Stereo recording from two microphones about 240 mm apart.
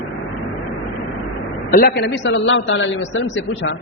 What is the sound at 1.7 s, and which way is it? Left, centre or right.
A man's voice, left.